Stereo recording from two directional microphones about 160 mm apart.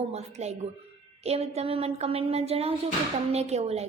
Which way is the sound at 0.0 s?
40° right (ahead or behind).